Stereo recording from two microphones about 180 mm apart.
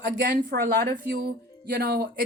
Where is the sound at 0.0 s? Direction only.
60° right (ahead or behind).